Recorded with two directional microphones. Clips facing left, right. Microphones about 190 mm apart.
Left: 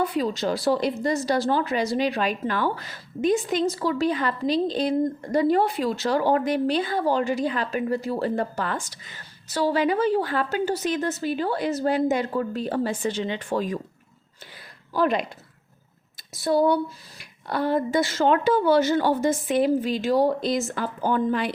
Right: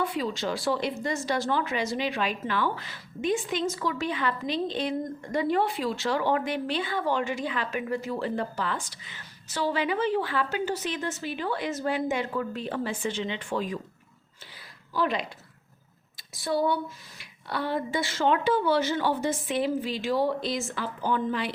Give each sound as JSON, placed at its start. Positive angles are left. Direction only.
{"t": 0.0, "sound": "a woman's voice", "side_deg": 40}
{"t": 14.9, "sound": "speech", "side_deg": 50}